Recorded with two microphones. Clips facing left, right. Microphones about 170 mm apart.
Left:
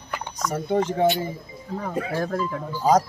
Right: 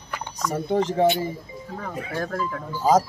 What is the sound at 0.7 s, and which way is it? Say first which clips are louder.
Speech: right 1 dB; centre (ahead or behind).